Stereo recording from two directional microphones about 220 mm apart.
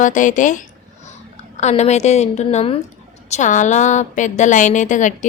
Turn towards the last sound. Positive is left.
turn(degrees=35)  # may be behind; listen again after turning